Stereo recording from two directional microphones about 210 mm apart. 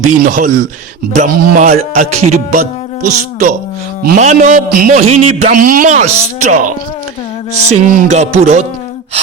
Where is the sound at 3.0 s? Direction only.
40° right (ahead or behind).